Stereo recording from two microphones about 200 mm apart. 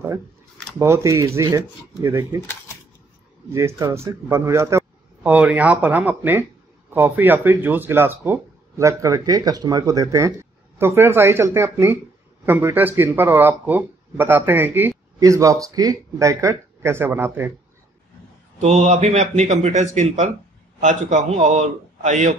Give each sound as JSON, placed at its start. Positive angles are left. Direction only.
{"t": 0.7, "sound": "speech", "side_deg": -15}
{"t": 3.5, "sound": "speech", "side_deg": -15}
{"t": 18.6, "sound": "speech", "side_deg": -35}